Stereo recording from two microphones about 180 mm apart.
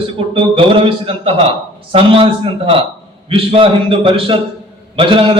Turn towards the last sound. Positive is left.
turn(degrees=-30)  # may be behind; listen again after turning